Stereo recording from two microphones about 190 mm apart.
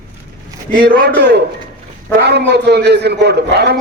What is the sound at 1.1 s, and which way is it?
A man's voice, 60° right (ahead or behind).